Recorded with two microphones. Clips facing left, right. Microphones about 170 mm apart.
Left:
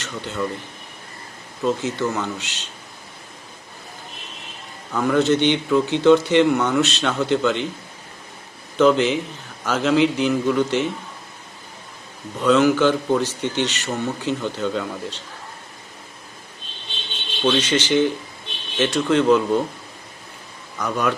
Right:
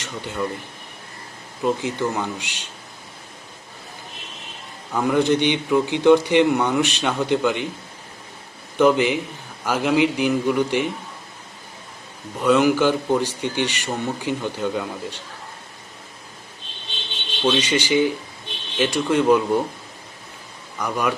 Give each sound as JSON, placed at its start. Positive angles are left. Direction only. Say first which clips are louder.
{"t": 1.6, "sound": "a man's voice", "louder": "even", "side_deg": -15}
{"t": 4.9, "sound": "a man's voice", "louder": "left 1 dB", "side_deg": -15}
{"t": 8.8, "sound": "a man's voice", "louder": "left 1 dB", "side_deg": -15}
{"t": 12.4, "sound": "a man's voice", "louder": "left 1 dB", "side_deg": -10}
{"t": 17.4, "sound": "a man's voice", "louder": "left 1 dB", "side_deg": -10}
{"t": 20.7, "sound": "a man's voice", "louder": "left 1 dB", "side_deg": -10}